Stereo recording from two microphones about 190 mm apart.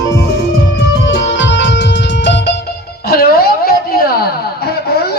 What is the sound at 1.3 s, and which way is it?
Music, 75° left (ahead or behind).